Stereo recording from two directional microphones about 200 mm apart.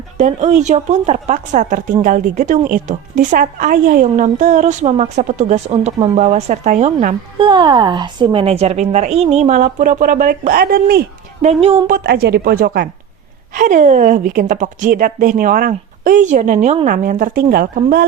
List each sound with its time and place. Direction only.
0.2 s speech: 40° right (ahead or behind)
7.3 s speech: 25° right (ahead or behind); by 11.0 s 45° right (ahead or behind)
11.4 s speech: 30° right (ahead or behind)
11.9 s speech: 45° right (ahead or behind)